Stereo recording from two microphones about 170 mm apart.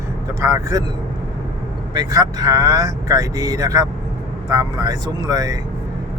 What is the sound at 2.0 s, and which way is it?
Speech, 20° right (ahead or behind).